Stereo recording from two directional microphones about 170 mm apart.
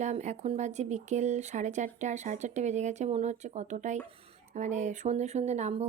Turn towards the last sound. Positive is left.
turn(degrees=-40)  # may be behind; listen again after turning